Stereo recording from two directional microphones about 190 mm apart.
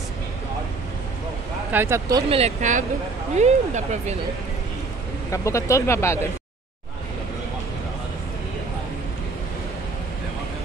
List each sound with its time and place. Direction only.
1.7 s speech: 15° right (ahead or behind)
2.2 s speech: 30° right (ahead or behind)
5.3 s speech: 15° left (ahead or behind)